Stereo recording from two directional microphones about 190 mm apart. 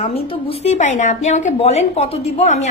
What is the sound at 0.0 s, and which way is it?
A woman's voice, 30° left (ahead or behind).